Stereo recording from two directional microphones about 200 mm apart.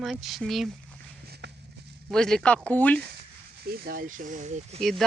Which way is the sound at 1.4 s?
55° right (ahead or behind).